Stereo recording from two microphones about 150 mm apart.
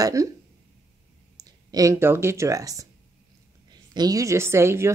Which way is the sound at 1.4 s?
25° right (ahead or behind).